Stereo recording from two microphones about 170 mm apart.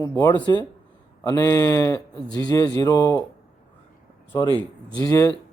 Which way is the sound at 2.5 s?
20° left (ahead or behind).